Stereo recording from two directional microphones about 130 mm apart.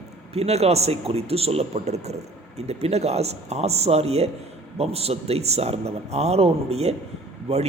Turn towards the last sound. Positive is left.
turn(degrees=-55)  # may be behind; listen again after turning